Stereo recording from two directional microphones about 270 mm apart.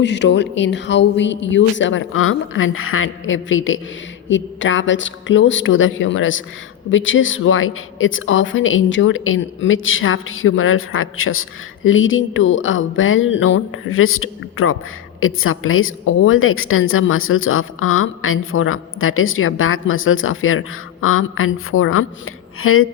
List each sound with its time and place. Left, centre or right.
0.0 s a woman's voice: left